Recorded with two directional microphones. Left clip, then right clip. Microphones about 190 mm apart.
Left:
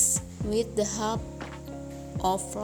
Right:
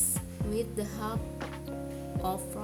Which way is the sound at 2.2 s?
20° left (ahead or behind).